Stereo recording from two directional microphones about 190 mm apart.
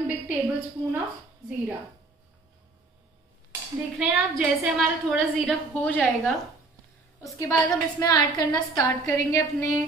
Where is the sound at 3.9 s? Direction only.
5° right (ahead or behind).